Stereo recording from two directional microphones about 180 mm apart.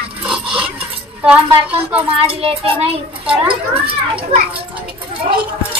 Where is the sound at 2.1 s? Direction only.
35° right (ahead or behind).